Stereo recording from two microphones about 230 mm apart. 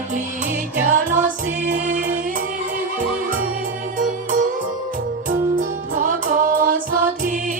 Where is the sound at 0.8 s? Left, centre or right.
Right.